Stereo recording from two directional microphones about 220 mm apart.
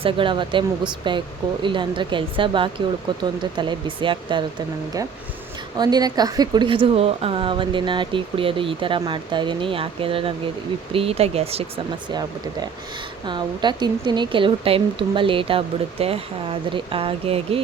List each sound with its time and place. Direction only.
0.0 s a woman's voice: 20° right (ahead or behind)
5.7 s a woman's voice: 20° right (ahead or behind)
13.2 s a woman's voice: 20° right (ahead or behind)